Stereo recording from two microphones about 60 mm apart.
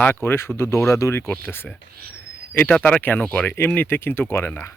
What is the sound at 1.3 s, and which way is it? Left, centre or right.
Speech, left.